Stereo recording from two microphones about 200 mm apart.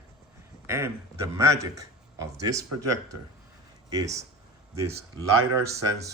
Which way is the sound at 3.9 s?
15° right (ahead or behind).